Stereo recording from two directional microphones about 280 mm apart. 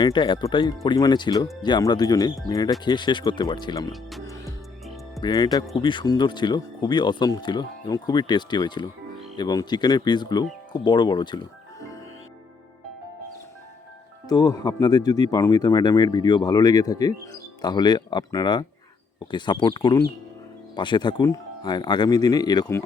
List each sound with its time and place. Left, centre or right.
0.0 s speech: centre
5.2 s speech: centre
14.3 s speech: centre